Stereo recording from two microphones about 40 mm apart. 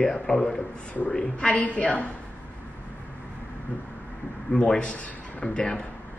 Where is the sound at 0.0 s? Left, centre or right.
Centre.